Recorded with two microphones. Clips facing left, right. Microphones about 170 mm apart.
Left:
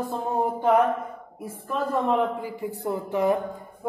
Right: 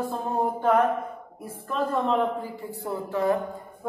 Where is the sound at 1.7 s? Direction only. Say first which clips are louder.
Left 1 dB; 10° left (ahead or behind).